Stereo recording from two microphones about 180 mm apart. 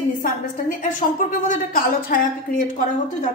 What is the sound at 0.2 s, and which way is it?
A woman's voice, 50° left (ahead or behind).